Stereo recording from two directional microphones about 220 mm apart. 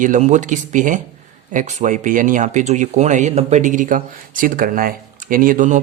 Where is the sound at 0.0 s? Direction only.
35° right (ahead or behind).